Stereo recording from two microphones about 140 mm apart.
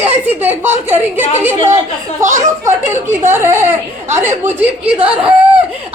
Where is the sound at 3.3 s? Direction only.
20° right (ahead or behind).